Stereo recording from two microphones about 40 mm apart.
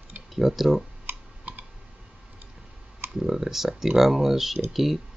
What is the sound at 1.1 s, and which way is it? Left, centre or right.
Typing, right.